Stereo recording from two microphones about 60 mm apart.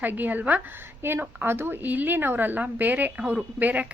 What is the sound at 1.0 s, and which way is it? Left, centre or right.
A woman's voice, right.